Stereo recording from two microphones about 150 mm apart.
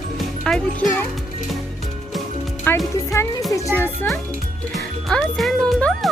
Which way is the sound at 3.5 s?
15° left (ahead or behind).